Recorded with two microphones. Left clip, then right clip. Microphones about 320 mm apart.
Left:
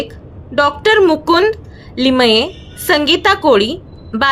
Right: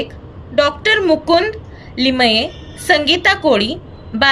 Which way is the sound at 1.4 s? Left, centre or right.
Left.